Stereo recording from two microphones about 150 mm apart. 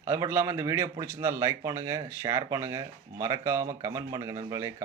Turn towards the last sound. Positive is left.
turn(degrees=-20)  # may be behind; listen again after turning